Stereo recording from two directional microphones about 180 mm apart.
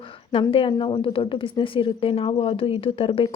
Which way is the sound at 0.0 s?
30° left (ahead or behind).